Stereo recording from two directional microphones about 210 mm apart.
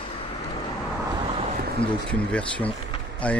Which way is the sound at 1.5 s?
45° right (ahead or behind).